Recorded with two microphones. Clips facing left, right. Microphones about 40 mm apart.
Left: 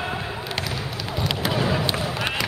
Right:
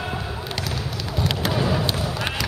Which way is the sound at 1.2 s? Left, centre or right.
Centre.